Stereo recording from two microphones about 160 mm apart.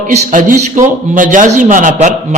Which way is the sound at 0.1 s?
50° right (ahead or behind).